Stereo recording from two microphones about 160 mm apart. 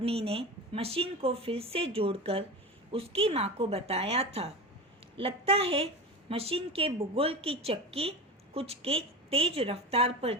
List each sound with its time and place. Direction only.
0.0 s a woman's voice: 40° right (ahead or behind)